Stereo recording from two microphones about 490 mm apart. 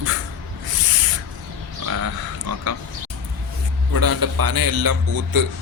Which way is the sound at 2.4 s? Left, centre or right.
Right.